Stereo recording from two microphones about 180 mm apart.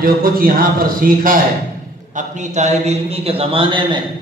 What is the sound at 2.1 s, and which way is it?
A man's voice, 40° right (ahead or behind).